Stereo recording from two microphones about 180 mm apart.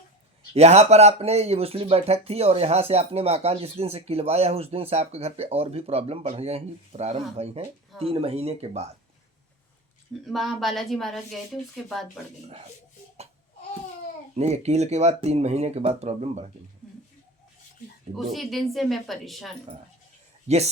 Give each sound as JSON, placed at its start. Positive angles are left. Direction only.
{"t": 0.5, "sound": "speech", "side_deg": -35}
{"t": 10.3, "sound": "a woman's voice", "side_deg": 0}
{"t": 14.3, "sound": "speech", "side_deg": -35}
{"t": 18.2, "sound": "a woman's voice", "side_deg": 0}